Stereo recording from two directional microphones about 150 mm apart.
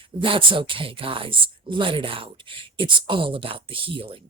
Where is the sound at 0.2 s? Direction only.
35° right (ahead or behind).